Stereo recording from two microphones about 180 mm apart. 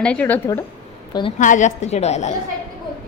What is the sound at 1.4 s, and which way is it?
Speech, 45° left (ahead or behind).